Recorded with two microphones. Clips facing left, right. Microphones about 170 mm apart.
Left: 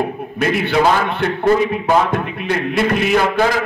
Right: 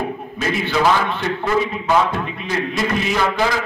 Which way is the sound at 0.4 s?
60° left (ahead or behind).